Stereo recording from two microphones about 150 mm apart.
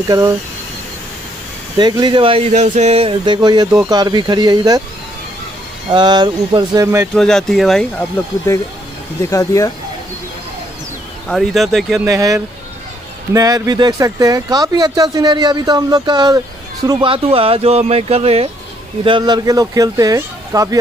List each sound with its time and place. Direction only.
1.8 s speech: 30° right (ahead or behind)
5.9 s speech: 30° right (ahead or behind)
7.2 s speech: 5° left (ahead or behind)
8.5 s speech: 15° left (ahead or behind)
11.2 s speech: centre (ahead or behind)
12.1 s speech: 20° right (ahead or behind); by 18.5 s 45° right (ahead or behind)
19.0 s speech: 30° right (ahead or behind)